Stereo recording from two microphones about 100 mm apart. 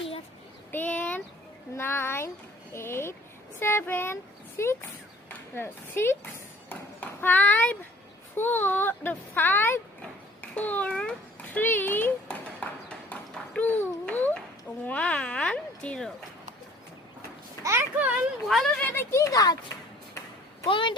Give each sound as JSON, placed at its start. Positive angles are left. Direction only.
{"t": 0.7, "sound": "a child's voice", "side_deg": 15}
{"t": 13.1, "sound": "a sound", "side_deg": 10}
{"t": 14.8, "sound": "speech", "side_deg": 15}
{"t": 17.6, "sound": "speech", "side_deg": -30}
{"t": 18.4, "sound": "speech", "side_deg": 5}
{"t": 18.8, "sound": "speech", "side_deg": 15}
{"t": 19.1, "sound": "speech", "side_deg": 35}
{"t": 20.7, "sound": "speech", "side_deg": 55}